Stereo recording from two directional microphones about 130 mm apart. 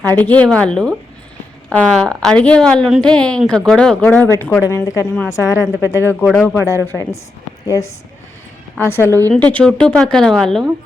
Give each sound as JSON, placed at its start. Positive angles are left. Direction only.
{"t": 0.0, "sound": "a woman's voice", "side_deg": 15}
{"t": 6.1, "sound": "a woman's voice", "side_deg": 10}